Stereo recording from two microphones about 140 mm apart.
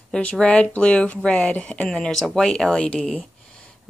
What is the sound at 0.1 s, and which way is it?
Speech, 10° left (ahead or behind).